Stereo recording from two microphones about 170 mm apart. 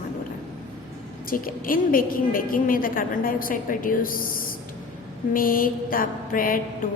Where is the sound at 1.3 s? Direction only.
55° left (ahead or behind).